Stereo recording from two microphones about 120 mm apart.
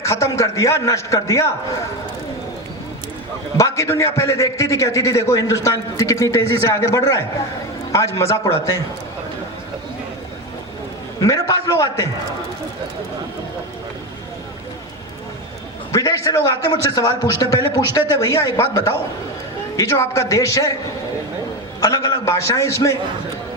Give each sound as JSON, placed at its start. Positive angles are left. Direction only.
{"t": 0.0, "sound": "a man's voice", "side_deg": 25}
{"t": 3.6, "sound": "a man's voice", "side_deg": 25}
{"t": 11.3, "sound": "a man's voice", "side_deg": 30}
{"t": 15.9, "sound": "a man's voice", "side_deg": 30}
{"t": 21.8, "sound": "a man's voice", "side_deg": 30}